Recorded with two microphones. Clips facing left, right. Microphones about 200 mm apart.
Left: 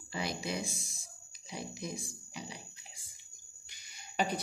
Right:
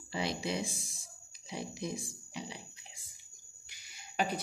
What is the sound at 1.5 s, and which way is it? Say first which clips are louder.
Speech: right 2 dB; 25° right (ahead or behind).